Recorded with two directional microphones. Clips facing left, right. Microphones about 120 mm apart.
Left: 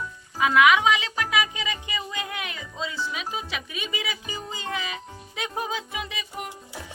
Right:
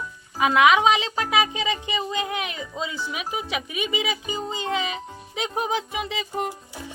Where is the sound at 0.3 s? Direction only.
25° right (ahead or behind).